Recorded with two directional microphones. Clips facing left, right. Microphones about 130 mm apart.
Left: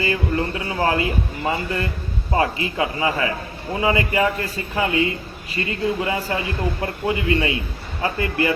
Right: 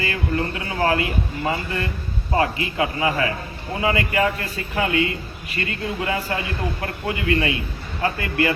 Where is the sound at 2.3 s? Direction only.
25° left (ahead or behind).